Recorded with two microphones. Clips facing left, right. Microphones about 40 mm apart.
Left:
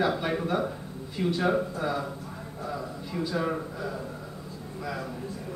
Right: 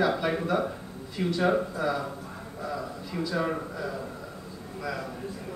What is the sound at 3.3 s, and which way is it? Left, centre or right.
Speech, centre.